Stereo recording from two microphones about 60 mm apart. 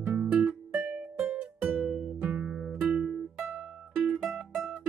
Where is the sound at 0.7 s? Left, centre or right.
Centre.